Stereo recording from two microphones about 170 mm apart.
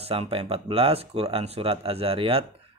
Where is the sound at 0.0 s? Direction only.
35° right (ahead or behind).